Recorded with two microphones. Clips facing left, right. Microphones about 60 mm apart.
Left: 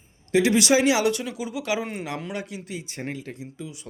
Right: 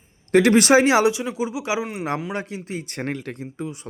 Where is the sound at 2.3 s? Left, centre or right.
Right.